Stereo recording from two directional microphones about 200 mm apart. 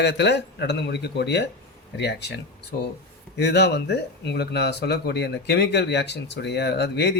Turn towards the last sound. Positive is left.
turn(degrees=60)  # may be behind; listen again after turning